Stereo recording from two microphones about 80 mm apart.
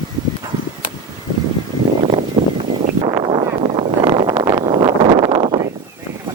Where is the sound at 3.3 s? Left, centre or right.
Right.